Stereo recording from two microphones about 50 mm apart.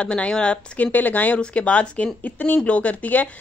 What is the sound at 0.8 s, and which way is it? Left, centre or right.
Speech, left.